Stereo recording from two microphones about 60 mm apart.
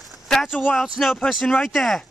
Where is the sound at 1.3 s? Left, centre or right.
Centre.